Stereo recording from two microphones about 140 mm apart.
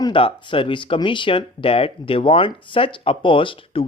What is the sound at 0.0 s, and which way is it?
Speech, 40° left (ahead or behind).